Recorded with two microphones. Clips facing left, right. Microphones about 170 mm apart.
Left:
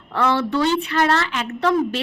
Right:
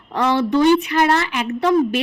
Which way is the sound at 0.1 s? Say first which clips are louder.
Right 2 dB; 15° right (ahead or behind).